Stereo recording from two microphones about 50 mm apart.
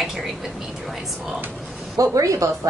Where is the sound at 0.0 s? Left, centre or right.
Centre.